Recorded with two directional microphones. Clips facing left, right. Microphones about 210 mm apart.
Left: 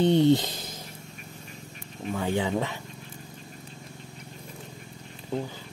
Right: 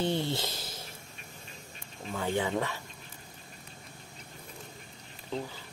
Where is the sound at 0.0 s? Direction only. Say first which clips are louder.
Left 11 dB; 20° left (ahead or behind).